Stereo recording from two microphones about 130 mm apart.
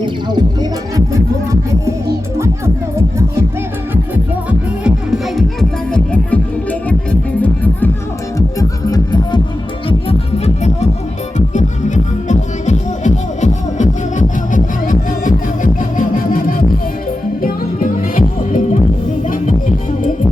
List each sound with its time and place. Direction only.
0.0 s music: 35° right (ahead or behind)
4.8 s music: 5° right (ahead or behind); by 7.9 s 10° left (ahead or behind)
8.4 s music: 25° left (ahead or behind)
10.1 s music: 55° left (ahead or behind)
11.3 s music: 70° left (ahead or behind); by 18.8 s 90° left